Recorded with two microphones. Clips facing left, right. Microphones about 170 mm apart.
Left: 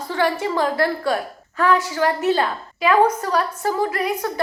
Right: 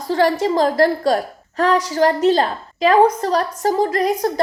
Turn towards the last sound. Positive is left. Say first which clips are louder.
# right 4 dB
turn(degrees=-40)  # may be behind; listen again after turning